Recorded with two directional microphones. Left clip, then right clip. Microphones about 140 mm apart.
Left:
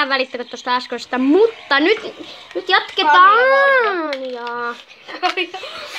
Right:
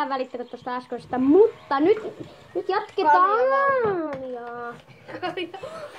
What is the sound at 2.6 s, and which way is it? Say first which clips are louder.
A child's voice: left 7 dB; 45° left (ahead or behind).